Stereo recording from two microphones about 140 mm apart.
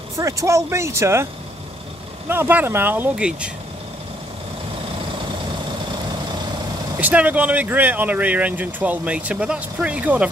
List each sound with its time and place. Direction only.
0.1 s speech: 25° right (ahead or behind)
2.2 s speech: 15° right (ahead or behind)
7.0 s speech: 10° right (ahead or behind)